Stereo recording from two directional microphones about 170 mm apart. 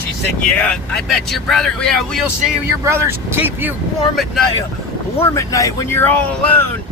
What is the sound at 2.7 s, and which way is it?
Speech, 15° right (ahead or behind).